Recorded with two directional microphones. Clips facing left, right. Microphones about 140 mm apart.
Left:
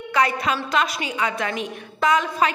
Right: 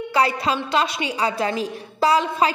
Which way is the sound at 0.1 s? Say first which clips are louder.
Right 1 dB; 30° right (ahead or behind).